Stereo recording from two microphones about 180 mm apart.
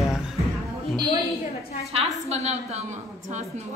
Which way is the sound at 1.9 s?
40° right (ahead or behind).